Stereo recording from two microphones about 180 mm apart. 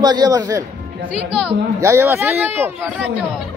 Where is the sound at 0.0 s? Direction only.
20° right (ahead or behind).